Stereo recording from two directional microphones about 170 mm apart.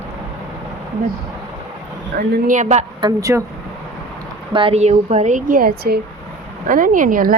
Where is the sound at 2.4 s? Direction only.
45° right (ahead or behind).